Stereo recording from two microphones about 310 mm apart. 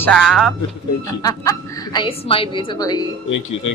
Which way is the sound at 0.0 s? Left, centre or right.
Centre.